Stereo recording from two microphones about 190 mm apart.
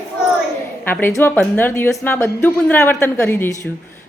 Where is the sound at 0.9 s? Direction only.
10° left (ahead or behind).